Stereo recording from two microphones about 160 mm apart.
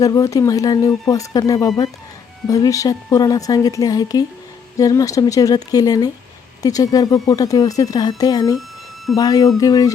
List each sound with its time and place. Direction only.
0.0 s speech: 20° left (ahead or behind)